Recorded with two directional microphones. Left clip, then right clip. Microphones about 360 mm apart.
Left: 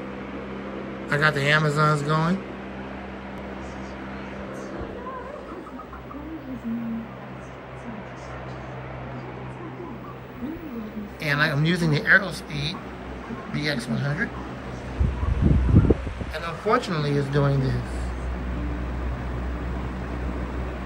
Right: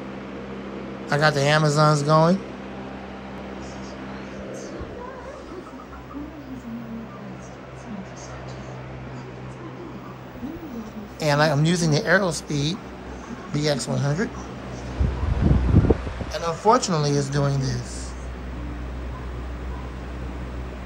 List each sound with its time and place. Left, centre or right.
1.0 s speech: centre
11.1 s speech: centre
15.4 s a sound: centre
15.9 s speech: centre